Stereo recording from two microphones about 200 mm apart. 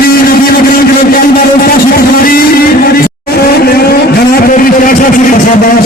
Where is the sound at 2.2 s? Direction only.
45° left (ahead or behind).